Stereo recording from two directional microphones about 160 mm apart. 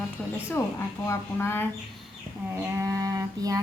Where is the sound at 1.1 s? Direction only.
15° left (ahead or behind).